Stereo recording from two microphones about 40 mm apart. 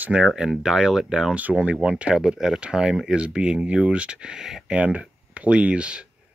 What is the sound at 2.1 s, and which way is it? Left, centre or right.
Speech, centre.